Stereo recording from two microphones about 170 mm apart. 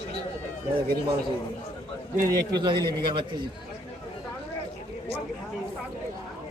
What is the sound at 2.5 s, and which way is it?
Speech, 25° right (ahead or behind).